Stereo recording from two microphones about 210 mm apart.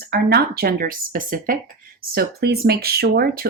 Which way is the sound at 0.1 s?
50° right (ahead or behind).